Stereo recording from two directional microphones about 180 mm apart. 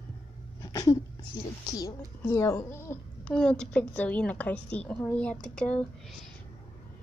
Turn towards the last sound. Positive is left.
turn(degrees=5)  # may be behind; listen again after turning